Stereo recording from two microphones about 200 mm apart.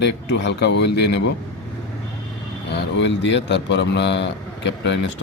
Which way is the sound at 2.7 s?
60° left (ahead or behind).